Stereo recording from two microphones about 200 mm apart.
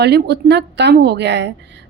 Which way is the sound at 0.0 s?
55° right (ahead or behind).